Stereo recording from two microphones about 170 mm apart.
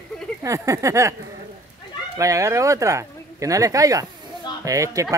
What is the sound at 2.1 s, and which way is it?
Speech, 20° right (ahead or behind).